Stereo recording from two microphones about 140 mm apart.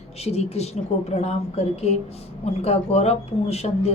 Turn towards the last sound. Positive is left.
turn(degrees=50)  # may be behind; listen again after turning